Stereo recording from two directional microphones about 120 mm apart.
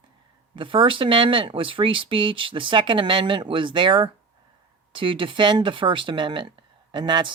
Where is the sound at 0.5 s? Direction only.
45° right (ahead or behind).